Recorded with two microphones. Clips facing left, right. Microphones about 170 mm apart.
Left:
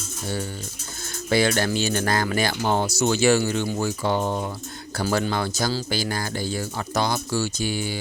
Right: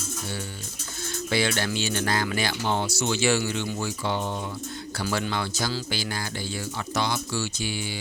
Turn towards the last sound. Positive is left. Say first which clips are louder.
# left 5 dB
turn(degrees=45)  # may be behind; listen again after turning